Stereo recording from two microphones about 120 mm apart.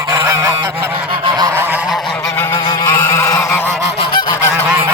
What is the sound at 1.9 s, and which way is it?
Goose, centre (ahead or behind).